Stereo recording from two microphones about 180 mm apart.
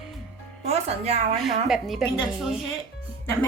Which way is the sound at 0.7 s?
35° right (ahead or behind).